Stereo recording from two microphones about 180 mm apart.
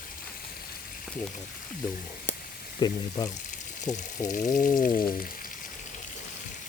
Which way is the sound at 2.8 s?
25° left (ahead or behind).